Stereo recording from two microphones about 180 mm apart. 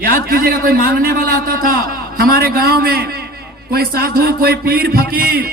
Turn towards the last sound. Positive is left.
turn(degrees=-55)  # may be behind; listen again after turning